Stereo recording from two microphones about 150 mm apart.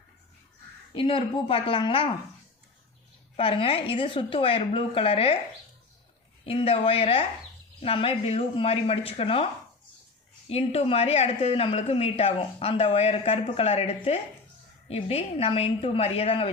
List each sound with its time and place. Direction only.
0.9 s a woman's voice: 35° left (ahead or behind)
3.3 s a woman's voice: 35° left (ahead or behind)
6.4 s a woman's voice: 40° left (ahead or behind)
10.5 s a woman's voice: 45° left (ahead or behind)